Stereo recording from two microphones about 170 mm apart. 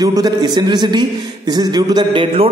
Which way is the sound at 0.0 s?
20° right (ahead or behind).